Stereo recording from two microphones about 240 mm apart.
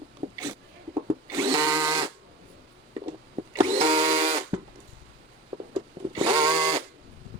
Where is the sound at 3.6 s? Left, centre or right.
Right.